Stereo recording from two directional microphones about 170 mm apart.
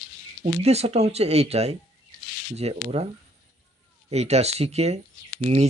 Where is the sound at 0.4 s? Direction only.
40° right (ahead or behind).